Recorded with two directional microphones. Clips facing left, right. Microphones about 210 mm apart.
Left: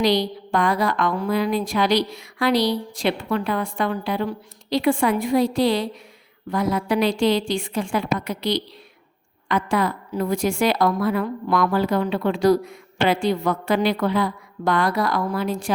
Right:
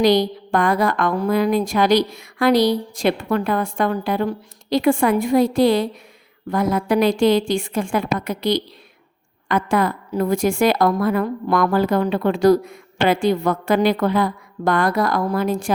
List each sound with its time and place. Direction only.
0.0 s a woman's voice: 50° right (ahead or behind)